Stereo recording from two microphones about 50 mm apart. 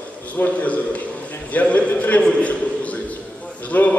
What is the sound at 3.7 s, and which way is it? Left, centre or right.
Speech, left.